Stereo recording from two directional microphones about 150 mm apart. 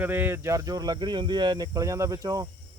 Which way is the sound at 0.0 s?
10° right (ahead or behind).